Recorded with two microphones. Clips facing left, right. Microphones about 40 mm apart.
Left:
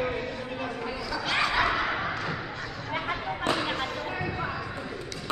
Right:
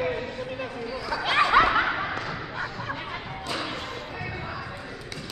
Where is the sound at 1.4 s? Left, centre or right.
Right.